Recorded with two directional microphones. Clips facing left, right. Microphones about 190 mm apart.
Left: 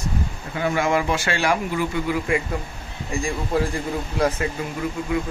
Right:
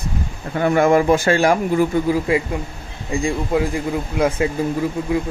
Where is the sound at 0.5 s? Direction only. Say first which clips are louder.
Right 7 dB; 50° right (ahead or behind).